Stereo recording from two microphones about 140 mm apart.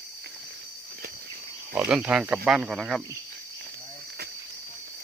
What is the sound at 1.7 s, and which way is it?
Speech, 10° right (ahead or behind).